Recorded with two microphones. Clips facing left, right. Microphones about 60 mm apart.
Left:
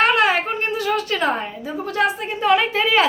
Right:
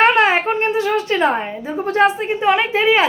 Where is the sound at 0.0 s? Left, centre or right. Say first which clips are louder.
Right 3 dB; right.